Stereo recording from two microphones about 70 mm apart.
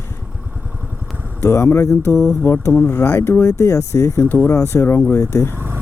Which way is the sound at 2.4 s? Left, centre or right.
Left.